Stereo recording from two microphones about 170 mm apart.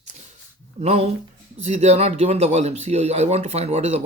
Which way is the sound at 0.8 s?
40° right (ahead or behind).